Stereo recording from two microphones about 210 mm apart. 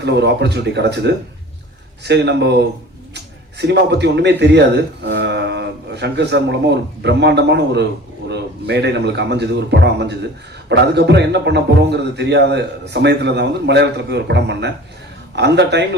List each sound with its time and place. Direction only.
0.0 s a man's voice: 55° right (ahead or behind)